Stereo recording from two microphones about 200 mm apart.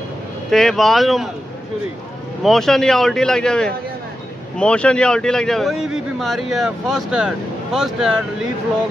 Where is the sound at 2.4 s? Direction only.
Centre (ahead or behind).